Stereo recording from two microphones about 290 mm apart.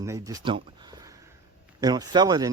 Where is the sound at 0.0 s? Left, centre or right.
Centre.